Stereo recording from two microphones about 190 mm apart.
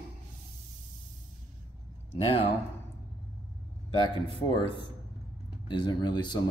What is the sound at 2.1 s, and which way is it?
Speech, 30° left (ahead or behind).